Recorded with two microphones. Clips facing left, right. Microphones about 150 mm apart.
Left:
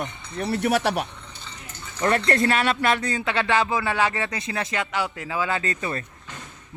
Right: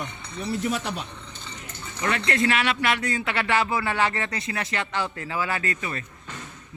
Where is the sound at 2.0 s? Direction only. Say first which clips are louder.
Left 4 dB; 40° left (ahead or behind).